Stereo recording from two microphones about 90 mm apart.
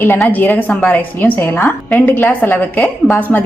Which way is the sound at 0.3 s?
20° left (ahead or behind).